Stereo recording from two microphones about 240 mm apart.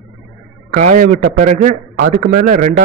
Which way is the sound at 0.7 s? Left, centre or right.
Right.